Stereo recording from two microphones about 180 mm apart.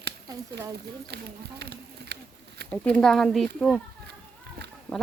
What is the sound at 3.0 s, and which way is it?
Speech, centre (ahead or behind).